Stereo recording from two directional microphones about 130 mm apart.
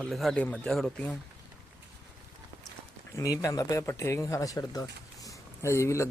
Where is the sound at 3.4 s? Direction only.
25° left (ahead or behind).